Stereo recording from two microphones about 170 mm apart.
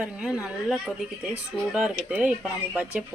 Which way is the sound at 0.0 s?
5° right (ahead or behind).